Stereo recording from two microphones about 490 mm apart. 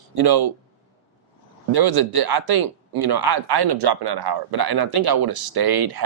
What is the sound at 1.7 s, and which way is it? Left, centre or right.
Speech, right.